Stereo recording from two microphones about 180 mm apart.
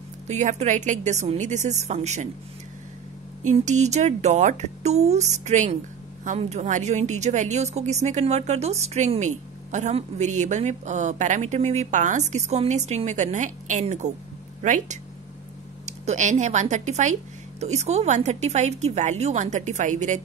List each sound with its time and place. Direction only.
0.3 s a woman's voice: 40° right (ahead or behind)
3.4 s a woman's voice: 40° right (ahead or behind)